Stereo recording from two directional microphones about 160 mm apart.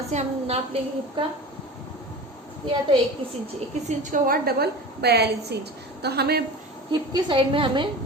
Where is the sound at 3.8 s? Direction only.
60° right (ahead or behind); by 6.4 s 85° right.